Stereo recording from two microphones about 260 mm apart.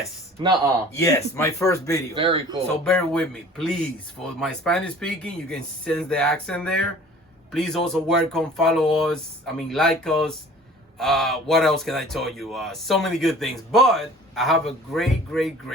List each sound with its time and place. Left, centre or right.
0.9 s speech: centre
2.1 s speech: centre
2.8 s speech: centre